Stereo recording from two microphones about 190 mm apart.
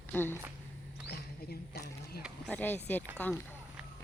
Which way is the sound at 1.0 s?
60° left (ahead or behind).